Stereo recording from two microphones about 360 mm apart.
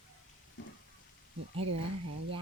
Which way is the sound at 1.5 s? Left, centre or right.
Right.